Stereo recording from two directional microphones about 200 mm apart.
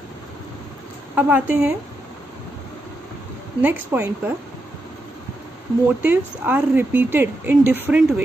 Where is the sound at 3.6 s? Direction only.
10° right (ahead or behind).